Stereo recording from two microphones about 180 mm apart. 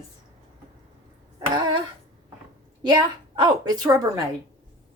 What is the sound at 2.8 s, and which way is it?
A woman's voice, 20° right (ahead or behind).